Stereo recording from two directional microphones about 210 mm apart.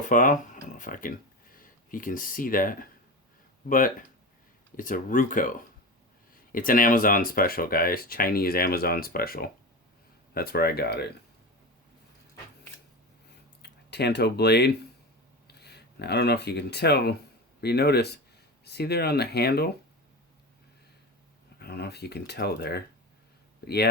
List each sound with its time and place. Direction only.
0.1 s speech: 40° left (ahead or behind)
6.5 s speech: 40° left (ahead or behind)
13.6 s speech: 50° left (ahead or behind)
21.6 s speech: 50° left (ahead or behind)